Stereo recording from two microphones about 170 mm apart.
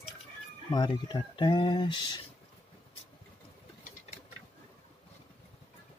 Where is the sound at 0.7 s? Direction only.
25° left (ahead or behind).